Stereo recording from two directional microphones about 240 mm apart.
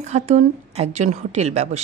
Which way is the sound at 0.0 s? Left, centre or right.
Right.